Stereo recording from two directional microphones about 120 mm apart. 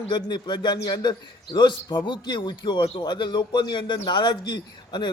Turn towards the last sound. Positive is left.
turn(degrees=40)  # may be behind; listen again after turning